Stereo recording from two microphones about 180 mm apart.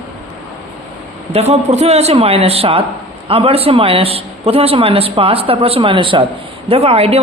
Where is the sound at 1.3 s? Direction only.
35° right (ahead or behind).